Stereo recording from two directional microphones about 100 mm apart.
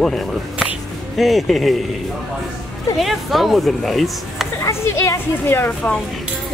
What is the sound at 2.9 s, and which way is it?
Speech, centre (ahead or behind).